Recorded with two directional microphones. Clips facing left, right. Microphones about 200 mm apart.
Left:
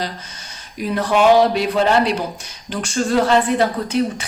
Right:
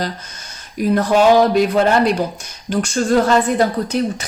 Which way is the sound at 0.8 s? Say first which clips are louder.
Right 3 dB; 45° right (ahead or behind).